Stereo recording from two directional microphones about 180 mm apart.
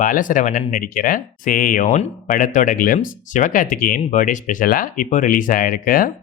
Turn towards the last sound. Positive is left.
turn(degrees=50)  # may be behind; listen again after turning